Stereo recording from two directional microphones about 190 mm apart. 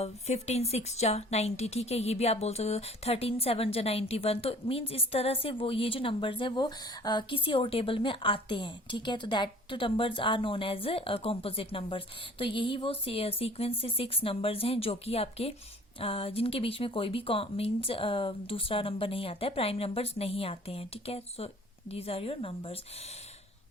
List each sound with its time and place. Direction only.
0.0 s a woman's voice: 35° left (ahead or behind)